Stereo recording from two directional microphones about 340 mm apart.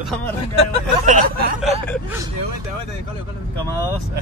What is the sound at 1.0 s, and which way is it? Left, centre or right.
Speech, right.